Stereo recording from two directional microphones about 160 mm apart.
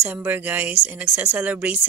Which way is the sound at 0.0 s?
10° right (ahead or behind).